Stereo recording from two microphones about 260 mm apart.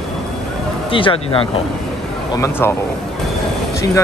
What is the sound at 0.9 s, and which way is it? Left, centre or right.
Speech, centre.